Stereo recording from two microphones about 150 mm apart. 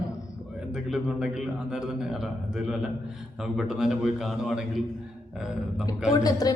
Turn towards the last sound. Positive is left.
turn(degrees=25)  # may be behind; listen again after turning